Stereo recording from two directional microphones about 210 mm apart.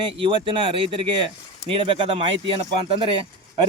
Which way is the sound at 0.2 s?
25° right (ahead or behind).